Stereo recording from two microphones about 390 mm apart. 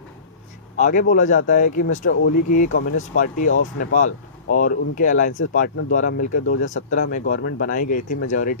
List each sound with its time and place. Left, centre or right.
0.8 s speech: centre
3.5 s speech: left
4.5 s speech: centre